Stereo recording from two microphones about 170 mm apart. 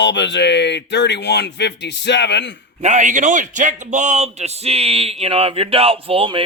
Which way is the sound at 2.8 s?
45° right (ahead or behind).